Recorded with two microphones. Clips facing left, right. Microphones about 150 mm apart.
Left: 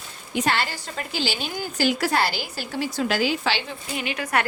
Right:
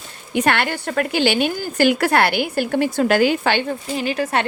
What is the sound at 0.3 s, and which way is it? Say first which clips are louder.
Speech: right 5 dB; 60° right (ahead or behind).